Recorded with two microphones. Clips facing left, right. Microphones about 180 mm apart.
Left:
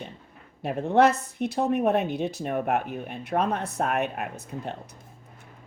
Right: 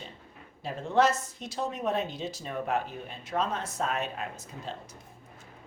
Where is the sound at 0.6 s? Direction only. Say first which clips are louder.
Left 5 dB; 60° left (ahead or behind).